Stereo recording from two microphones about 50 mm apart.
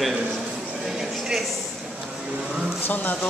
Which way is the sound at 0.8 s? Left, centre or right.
Centre.